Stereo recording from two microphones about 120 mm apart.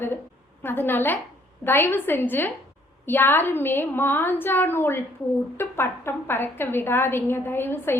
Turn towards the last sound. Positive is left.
turn(degrees=20)  # may be behind; listen again after turning